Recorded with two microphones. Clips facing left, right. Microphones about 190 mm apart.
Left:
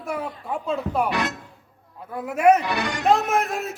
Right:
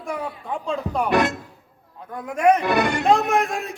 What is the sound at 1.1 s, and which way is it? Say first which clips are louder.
Music: right 6 dB; 50° right (ahead or behind).